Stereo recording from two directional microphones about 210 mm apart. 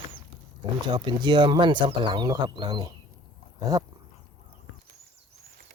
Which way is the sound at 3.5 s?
20° right (ahead or behind).